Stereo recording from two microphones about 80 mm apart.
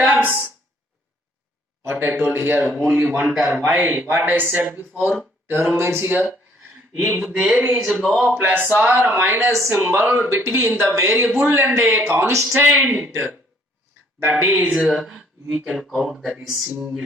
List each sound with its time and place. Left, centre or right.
0.0 s a sound: right
1.8 s speech: right
2.7 s speech: centre
3.7 s speech: right
5.7 s speech: right; by 7.8 s centre
7.8 s speech: centre
8.4 s speech: right
9.5 s speech: right
9.8 s speech: right; by 17.0 s centre